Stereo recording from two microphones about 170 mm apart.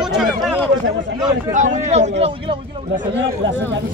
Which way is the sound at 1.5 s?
45° right (ahead or behind).